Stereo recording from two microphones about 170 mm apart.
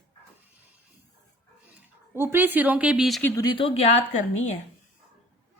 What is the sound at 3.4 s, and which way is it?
Speech, 30° left (ahead or behind).